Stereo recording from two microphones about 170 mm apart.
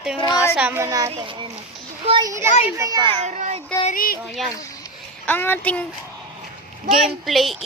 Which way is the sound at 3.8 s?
55° left (ahead or behind).